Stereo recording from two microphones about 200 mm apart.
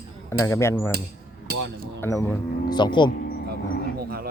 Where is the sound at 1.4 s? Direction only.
55° right (ahead or behind).